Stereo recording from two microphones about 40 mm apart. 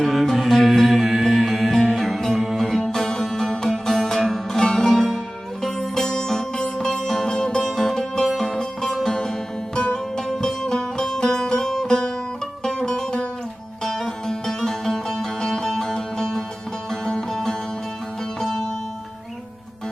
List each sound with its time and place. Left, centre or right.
0.0 s music: centre
2.6 s music: centre
8.9 s music: centre
9.7 s music: left